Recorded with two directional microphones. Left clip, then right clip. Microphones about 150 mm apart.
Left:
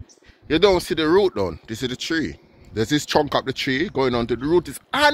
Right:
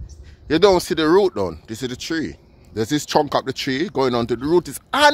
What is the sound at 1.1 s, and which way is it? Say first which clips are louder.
Speech: right 1 dB; 25° right (ahead or behind).